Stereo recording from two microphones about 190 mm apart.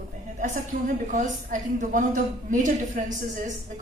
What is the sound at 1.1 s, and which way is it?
A woman's voice, 40° right (ahead or behind).